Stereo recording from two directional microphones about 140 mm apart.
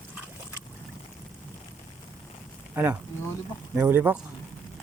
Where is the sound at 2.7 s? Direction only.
15° right (ahead or behind).